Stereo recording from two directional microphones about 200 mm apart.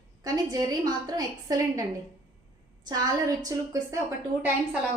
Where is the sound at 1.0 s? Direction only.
20° right (ahead or behind).